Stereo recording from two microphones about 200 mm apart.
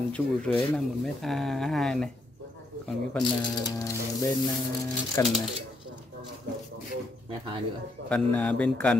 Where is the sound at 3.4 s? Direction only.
20° left (ahead or behind).